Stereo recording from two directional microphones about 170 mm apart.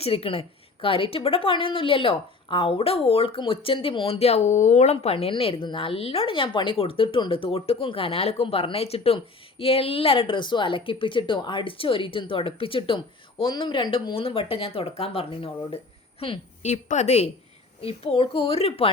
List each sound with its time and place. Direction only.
0.0 s a woman's voice: 35° left (ahead or behind)